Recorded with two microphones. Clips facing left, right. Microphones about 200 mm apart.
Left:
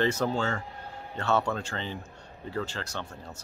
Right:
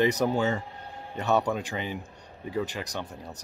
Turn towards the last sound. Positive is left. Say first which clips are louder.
# right 2 dB
turn(degrees=-15)  # may be behind; listen again after turning